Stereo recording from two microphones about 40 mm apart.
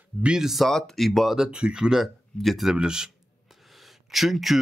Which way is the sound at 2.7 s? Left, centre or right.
Centre.